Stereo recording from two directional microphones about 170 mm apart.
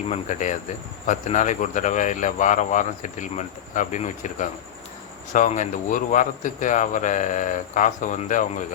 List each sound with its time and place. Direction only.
0.1 s speech: 45° left (ahead or behind)